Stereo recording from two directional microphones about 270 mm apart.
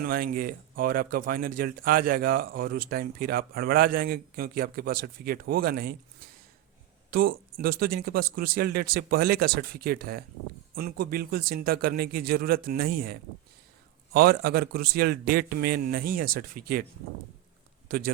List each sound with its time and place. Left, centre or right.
0.0 s speech: right
17.8 s speech: right